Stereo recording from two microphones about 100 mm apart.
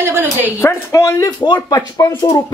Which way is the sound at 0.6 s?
30° left (ahead or behind).